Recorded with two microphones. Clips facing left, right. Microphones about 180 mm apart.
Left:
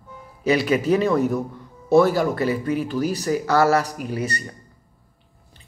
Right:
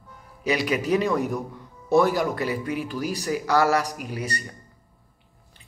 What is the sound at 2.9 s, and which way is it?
Speech, 10° right (ahead or behind).